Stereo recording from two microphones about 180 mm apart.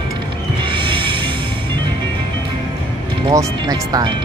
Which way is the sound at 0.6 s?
25° right (ahead or behind).